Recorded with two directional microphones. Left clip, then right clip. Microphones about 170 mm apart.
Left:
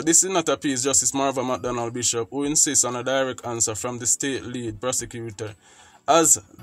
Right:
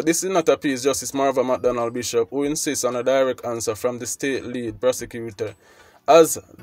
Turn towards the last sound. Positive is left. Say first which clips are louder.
# right 5 dB
turn(degrees=-15)  # may be behind; listen again after turning